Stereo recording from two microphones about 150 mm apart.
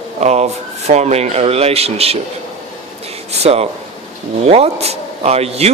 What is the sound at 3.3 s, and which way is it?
Speech, 45° right (ahead or behind).